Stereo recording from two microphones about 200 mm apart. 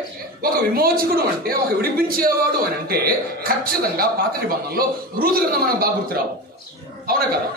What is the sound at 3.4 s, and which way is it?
A man's voice, 45° right (ahead or behind).